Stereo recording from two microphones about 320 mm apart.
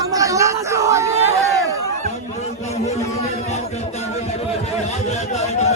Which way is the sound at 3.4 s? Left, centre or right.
Left.